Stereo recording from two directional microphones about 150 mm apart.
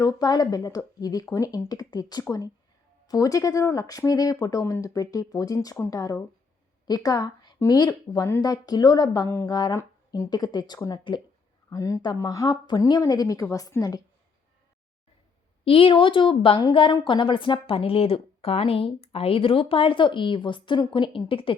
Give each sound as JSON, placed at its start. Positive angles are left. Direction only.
{"t": 0.0, "sound": "speech", "side_deg": 25}
{"t": 15.6, "sound": "a woman's voice", "side_deg": 40}